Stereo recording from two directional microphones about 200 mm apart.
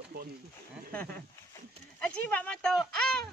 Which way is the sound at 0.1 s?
50° right (ahead or behind).